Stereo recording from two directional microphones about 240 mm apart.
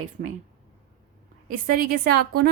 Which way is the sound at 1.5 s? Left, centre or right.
Right.